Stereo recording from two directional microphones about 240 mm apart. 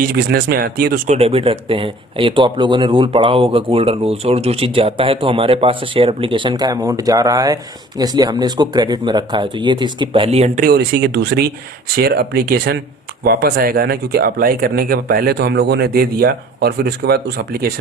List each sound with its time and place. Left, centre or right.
0.0 s speech: right